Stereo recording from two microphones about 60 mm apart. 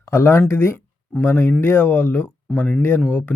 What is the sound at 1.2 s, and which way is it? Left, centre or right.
Speech, left.